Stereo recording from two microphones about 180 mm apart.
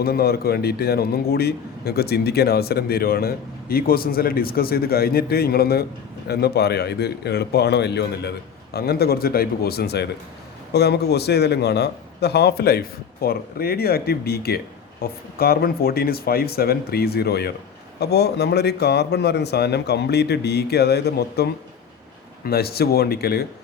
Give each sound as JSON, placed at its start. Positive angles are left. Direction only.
{"t": 0.0, "sound": "a man's voice", "side_deg": 60}
{"t": 22.4, "sound": "a man's voice", "side_deg": 60}